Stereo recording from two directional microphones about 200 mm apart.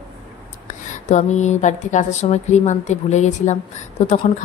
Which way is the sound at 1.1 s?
35° left (ahead or behind).